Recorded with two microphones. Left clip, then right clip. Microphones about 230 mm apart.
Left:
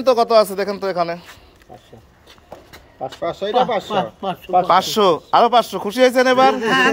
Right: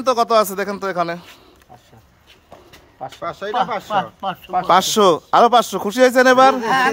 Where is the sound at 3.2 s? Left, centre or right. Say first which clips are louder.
Left 3 dB; right.